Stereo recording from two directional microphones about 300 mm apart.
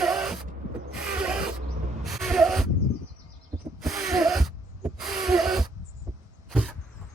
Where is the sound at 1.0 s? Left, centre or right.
Centre.